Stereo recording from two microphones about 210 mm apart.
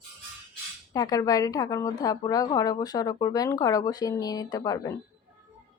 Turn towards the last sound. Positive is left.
turn(degrees=15)  # may be behind; listen again after turning